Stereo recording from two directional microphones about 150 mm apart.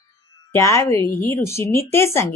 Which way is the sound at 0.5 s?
20° left (ahead or behind).